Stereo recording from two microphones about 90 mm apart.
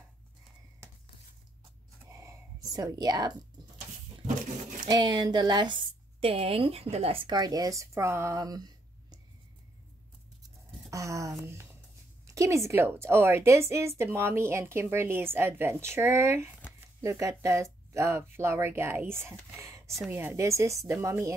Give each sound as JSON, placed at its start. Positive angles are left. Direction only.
{"t": 2.0, "sound": "whispering", "side_deg": -35}
{"t": 2.7, "sound": "a woman's voice", "side_deg": -50}
{"t": 4.8, "sound": "a woman's voice", "side_deg": -50}
{"t": 7.2, "sound": "speech", "side_deg": -50}
{"t": 10.9, "sound": "a woman's voice", "side_deg": -35}